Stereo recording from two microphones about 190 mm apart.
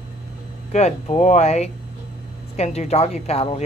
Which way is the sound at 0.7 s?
35° left (ahead or behind).